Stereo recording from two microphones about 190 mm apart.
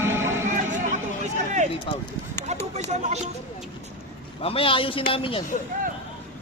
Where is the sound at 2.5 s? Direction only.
35° right (ahead or behind).